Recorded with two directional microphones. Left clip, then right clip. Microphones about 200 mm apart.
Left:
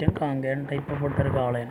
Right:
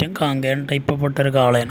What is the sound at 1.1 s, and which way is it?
Speech, 60° right (ahead or behind).